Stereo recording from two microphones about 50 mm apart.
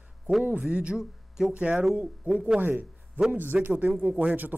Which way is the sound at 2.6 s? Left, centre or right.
Right.